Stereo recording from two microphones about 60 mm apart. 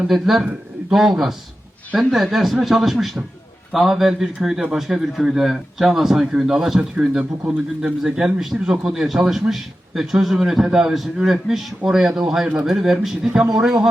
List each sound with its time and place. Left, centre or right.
0.1 s a man's voice: centre
6.7 s a man's voice: centre